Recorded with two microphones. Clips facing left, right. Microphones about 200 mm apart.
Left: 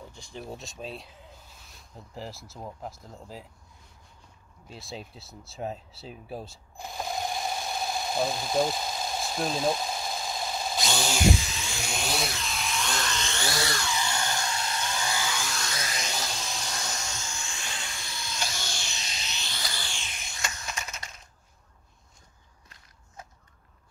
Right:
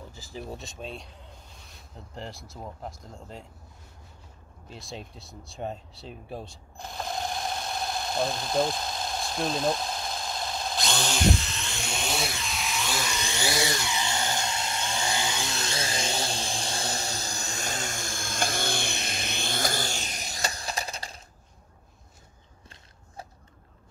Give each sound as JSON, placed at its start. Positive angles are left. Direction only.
{"t": 0.1, "sound": "speech", "side_deg": -5}
{"t": 4.6, "sound": "a sound", "side_deg": 0}
{"t": 23.2, "sound": "whip", "side_deg": -35}